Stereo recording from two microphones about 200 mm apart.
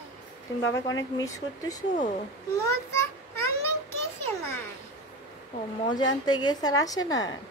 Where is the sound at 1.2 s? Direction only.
15° left (ahead or behind).